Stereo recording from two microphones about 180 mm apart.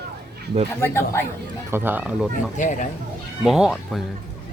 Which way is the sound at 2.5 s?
45° left (ahead or behind).